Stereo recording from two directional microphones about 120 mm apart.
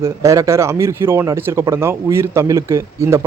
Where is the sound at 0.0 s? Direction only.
25° right (ahead or behind).